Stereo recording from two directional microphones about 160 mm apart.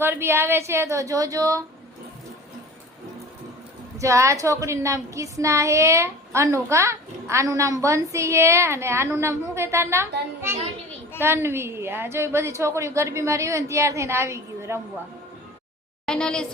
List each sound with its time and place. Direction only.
0.0 s a woman's voice: 15° right (ahead or behind)
3.9 s a woman's voice: 20° right (ahead or behind)
16.0 s speech: 5° left (ahead or behind)